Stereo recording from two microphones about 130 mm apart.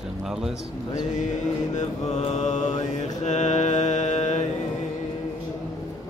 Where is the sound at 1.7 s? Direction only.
55° left (ahead or behind).